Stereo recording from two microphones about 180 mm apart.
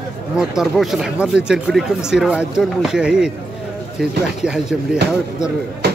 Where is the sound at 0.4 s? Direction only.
5° right (ahead or behind).